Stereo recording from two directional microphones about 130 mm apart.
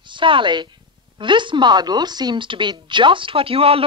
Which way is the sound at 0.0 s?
40° right (ahead or behind).